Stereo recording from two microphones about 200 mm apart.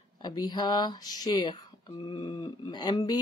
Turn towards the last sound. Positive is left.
turn(degrees=20)  # may be behind; listen again after turning